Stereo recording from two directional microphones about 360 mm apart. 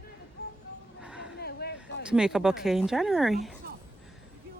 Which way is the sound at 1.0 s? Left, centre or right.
Centre.